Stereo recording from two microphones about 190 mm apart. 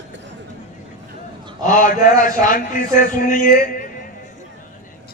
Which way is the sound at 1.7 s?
45° left (ahead or behind).